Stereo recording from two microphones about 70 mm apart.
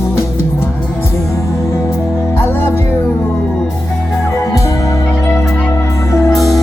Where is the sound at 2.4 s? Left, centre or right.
Left.